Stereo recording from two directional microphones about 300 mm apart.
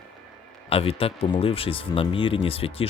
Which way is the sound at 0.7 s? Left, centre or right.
Centre.